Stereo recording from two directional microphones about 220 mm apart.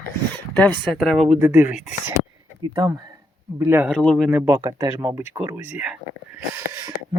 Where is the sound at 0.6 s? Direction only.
5° left (ahead or behind).